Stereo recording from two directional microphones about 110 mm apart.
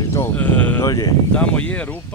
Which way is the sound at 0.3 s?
10° left (ahead or behind).